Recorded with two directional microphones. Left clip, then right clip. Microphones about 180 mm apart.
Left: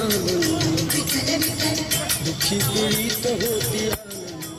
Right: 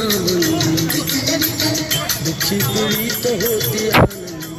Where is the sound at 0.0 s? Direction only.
65° right (ahead or behind).